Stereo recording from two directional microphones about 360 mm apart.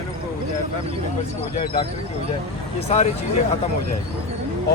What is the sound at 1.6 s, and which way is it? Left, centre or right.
Speech, centre.